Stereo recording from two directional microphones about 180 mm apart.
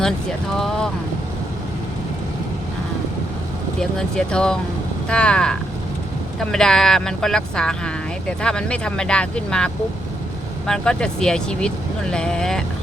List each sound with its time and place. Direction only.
0.5 s speech: 5° left (ahead or behind)
3.8 s speech: 5° left (ahead or behind)